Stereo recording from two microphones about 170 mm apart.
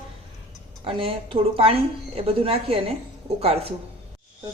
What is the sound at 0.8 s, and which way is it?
A woman's voice, 30° right (ahead or behind).